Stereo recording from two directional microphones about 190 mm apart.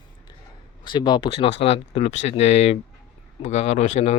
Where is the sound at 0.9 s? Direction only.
25° left (ahead or behind).